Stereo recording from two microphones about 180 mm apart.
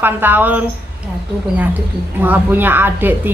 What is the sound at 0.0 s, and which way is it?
Speech, 10° right (ahead or behind).